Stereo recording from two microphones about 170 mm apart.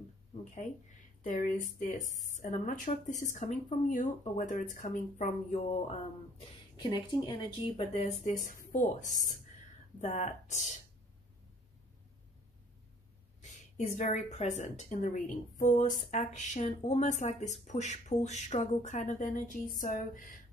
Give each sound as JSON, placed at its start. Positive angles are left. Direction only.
{"t": 1.2, "sound": "a woman's voice", "side_deg": 50}
{"t": 6.8, "sound": "a woman's voice", "side_deg": 25}
{"t": 13.4, "sound": "a woman's voice", "side_deg": 45}